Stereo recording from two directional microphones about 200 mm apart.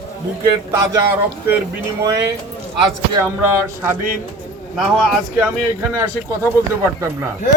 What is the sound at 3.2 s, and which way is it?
Speech, 10° right (ahead or behind).